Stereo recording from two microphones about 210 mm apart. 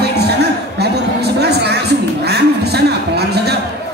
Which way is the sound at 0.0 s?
50° right (ahead or behind).